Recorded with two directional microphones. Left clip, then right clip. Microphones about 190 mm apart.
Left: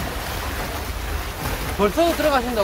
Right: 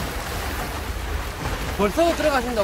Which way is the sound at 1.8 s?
20° left (ahead or behind).